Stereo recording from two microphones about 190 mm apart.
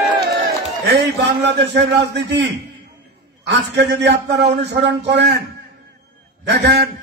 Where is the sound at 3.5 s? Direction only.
65° right (ahead or behind).